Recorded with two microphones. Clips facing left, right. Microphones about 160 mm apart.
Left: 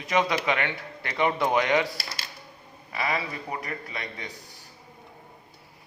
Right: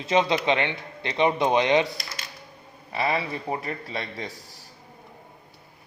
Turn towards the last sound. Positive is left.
turn(degrees=-35)  # may be behind; listen again after turning